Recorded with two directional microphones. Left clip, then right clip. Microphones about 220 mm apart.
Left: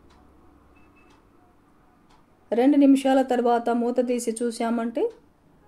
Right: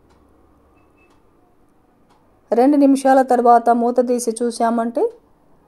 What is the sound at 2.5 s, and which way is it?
A woman's voice, 25° right (ahead or behind).